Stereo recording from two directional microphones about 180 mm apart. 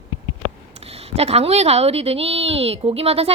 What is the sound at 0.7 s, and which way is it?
A woman's voice, 35° right (ahead or behind).